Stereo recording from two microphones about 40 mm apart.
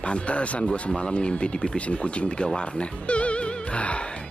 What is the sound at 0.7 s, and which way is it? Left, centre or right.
Speech, left.